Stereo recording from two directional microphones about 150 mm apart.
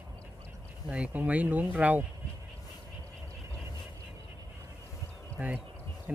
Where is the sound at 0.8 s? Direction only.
10° right (ahead or behind).